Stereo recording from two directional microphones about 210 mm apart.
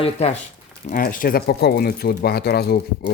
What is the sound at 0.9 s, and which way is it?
Speech, 40° left (ahead or behind).